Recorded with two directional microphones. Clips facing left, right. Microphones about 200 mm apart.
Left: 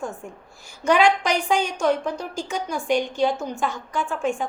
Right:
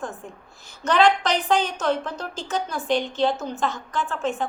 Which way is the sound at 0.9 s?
10° left (ahead or behind).